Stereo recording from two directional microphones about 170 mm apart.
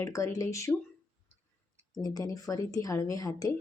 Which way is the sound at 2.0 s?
20° left (ahead or behind).